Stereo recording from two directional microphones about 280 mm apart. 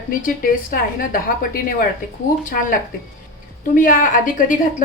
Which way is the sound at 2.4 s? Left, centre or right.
Left.